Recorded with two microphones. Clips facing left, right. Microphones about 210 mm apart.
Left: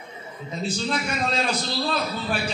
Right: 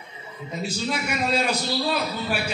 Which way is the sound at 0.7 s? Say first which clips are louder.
Left 1 dB; 10° right (ahead or behind).